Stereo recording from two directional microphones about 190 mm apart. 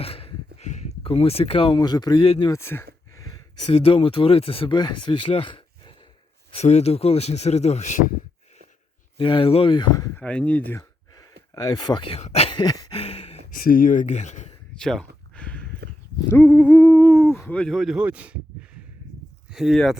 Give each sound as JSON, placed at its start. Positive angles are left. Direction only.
{"t": 0.0, "sound": "speech", "side_deg": 30}
{"t": 2.5, "sound": "speech", "side_deg": 15}
{"t": 3.7, "sound": "speech", "side_deg": 30}
{"t": 9.1, "sound": "speech", "side_deg": 25}
{"t": 11.5, "sound": "speech", "side_deg": 20}
{"t": 13.5, "sound": "speech", "side_deg": 50}
{"t": 14.8, "sound": "a sound", "side_deg": 5}
{"t": 16.2, "sound": "speech", "side_deg": 10}
{"t": 19.5, "sound": "speech", "side_deg": 0}